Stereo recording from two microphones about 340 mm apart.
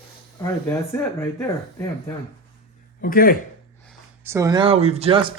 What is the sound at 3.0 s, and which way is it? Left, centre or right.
Speech, left.